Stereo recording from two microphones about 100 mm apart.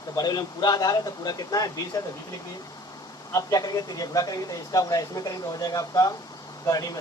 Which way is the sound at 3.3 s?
40° left (ahead or behind).